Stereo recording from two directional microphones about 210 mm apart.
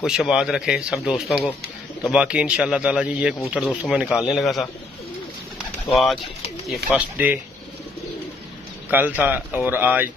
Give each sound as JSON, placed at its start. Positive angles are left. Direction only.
{"t": 0.0, "sound": "speech", "side_deg": -5}
{"t": 6.7, "sound": "speech", "side_deg": -5}
{"t": 8.9, "sound": "speech", "side_deg": -10}